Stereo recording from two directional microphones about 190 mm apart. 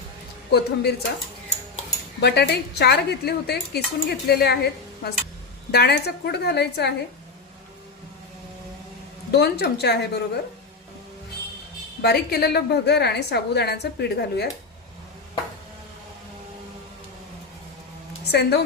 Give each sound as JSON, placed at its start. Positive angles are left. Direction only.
{"t": 0.5, "sound": "speech", "side_deg": 60}
{"t": 2.2, "sound": "speech", "side_deg": 60}
{"t": 9.3, "sound": "speech", "side_deg": 60}
{"t": 12.0, "sound": "speech", "side_deg": 55}
{"t": 18.3, "sound": "speech", "side_deg": 60}